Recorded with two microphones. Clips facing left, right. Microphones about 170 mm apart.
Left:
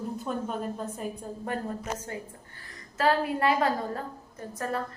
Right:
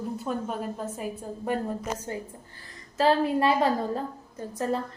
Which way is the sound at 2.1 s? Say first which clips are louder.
Right 3 dB; 30° right (ahead or behind).